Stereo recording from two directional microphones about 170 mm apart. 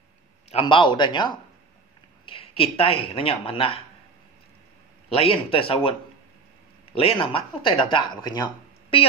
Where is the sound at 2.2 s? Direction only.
35° left (ahead or behind).